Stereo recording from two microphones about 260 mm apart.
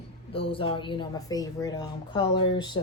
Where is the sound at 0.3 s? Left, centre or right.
Left.